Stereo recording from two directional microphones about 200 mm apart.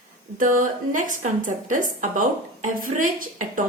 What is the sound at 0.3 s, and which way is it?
A woman's voice, 40° right (ahead or behind).